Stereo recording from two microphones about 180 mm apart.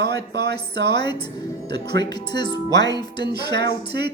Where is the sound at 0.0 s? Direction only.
65° right (ahead or behind).